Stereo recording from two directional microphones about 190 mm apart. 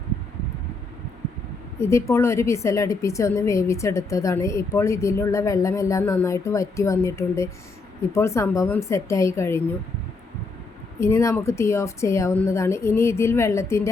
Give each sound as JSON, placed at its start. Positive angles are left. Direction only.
{"t": 1.8, "sound": "a woman's voice", "side_deg": 15}
{"t": 11.0, "sound": "a woman's voice", "side_deg": 15}